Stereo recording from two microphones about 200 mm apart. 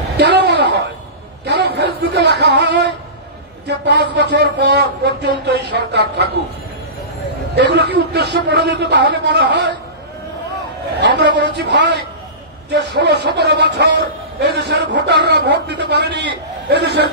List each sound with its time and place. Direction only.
0.2 s a sound: 60° right (ahead or behind)
3.6 s a man's voice: 60° right (ahead or behind)
7.5 s a man's voice: 55° right (ahead or behind)
11.0 s a man's voice: 60° right (ahead or behind)